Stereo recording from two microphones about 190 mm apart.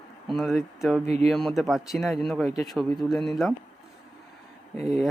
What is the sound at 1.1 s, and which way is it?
Speech, 35° right (ahead or behind).